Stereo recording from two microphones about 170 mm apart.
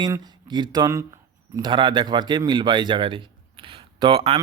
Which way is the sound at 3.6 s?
30° right (ahead or behind).